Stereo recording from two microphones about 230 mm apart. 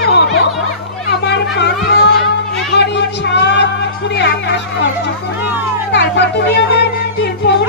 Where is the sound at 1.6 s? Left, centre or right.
Left.